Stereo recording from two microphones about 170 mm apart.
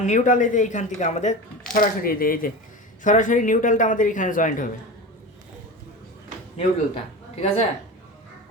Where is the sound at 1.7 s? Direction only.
55° left (ahead or behind).